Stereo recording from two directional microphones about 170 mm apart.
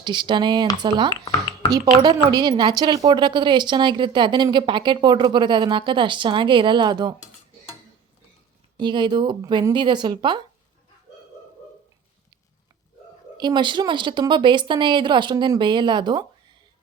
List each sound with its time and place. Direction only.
0.0 s a woman's voice: 25° right (ahead or behind)
1.2 s a sound: 30° left (ahead or behind)
2.0 s a woman's voice: 25° right (ahead or behind)
8.8 s a woman's voice: 25° right (ahead or behind)
13.3 s a woman's voice: 25° right (ahead or behind)